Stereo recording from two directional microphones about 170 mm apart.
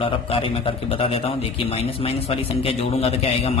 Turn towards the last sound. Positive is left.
turn(degrees=35)  # may be behind; listen again after turning